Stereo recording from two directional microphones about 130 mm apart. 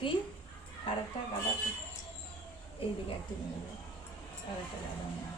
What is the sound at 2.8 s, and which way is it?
Speech, 45° left (ahead or behind).